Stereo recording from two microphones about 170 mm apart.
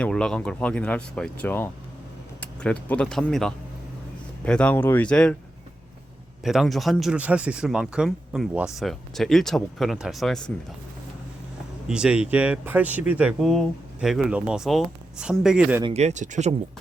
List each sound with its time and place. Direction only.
0.0 s speech: 5° left (ahead or behind)
6.4 s speech: centre (ahead or behind)
11.9 s speech: 5° right (ahead or behind)
15.8 s speech: 40° right (ahead or behind)